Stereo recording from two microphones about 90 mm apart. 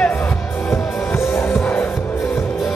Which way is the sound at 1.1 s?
30° left (ahead or behind).